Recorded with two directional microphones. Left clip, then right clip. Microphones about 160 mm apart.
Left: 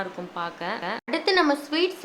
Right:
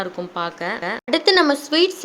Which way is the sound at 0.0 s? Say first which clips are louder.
Right 6 dB; 35° right (ahead or behind).